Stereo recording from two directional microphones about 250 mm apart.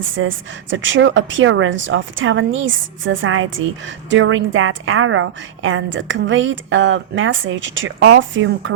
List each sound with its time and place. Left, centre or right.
0.0 s a woman's voice: right